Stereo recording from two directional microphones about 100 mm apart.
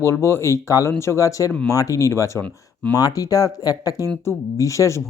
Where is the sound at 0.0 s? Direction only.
30° left (ahead or behind).